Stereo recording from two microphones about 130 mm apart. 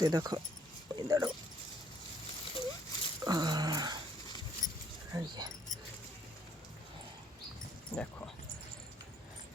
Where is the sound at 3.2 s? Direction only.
30° right (ahead or behind).